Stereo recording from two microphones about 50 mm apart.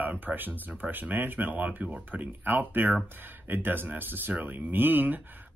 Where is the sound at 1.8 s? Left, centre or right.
Right.